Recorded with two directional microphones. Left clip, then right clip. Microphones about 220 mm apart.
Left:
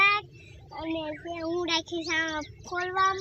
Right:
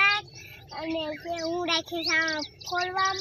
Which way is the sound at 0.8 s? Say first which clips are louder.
Right 2 dB; 30° right (ahead or behind).